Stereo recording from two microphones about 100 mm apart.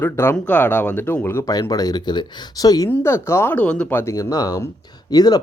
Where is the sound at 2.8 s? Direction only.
25° left (ahead or behind).